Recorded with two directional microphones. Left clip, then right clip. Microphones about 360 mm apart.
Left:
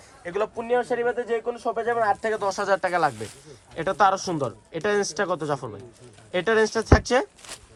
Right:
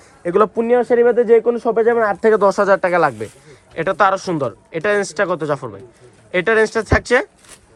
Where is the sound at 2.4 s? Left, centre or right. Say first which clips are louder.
Right 10 dB; centre.